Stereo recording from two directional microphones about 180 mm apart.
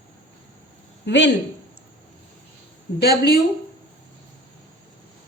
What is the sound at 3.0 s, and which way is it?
Speech, 60° left (ahead or behind).